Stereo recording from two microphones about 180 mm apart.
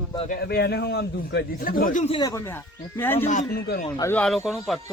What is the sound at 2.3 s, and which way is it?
Speech, 15° left (ahead or behind).